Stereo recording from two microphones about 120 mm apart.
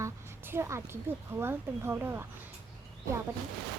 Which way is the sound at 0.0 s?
20° right (ahead or behind).